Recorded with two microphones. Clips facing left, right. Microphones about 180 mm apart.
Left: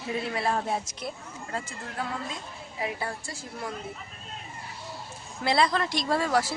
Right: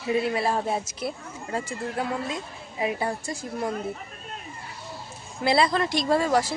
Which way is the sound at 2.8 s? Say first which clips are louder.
Right 6 dB; 20° right (ahead or behind).